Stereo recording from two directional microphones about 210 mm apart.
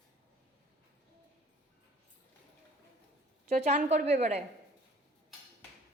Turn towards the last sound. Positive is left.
turn(degrees=-30)  # may be behind; listen again after turning